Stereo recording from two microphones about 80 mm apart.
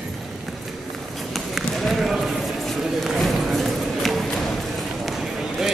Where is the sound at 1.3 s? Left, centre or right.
Centre.